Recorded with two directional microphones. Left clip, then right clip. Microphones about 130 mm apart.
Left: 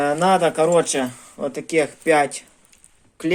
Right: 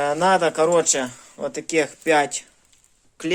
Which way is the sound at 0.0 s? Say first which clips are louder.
Left 1 dB; 15° right (ahead or behind).